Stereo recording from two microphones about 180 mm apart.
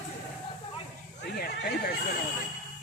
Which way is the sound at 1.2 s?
60° left (ahead or behind).